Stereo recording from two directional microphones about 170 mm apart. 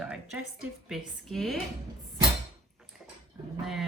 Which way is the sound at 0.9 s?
Centre (ahead or behind).